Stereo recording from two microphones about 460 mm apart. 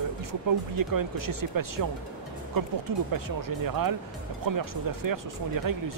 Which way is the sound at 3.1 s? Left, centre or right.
Right.